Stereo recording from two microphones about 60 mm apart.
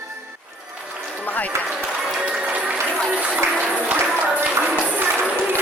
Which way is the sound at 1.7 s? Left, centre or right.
Centre.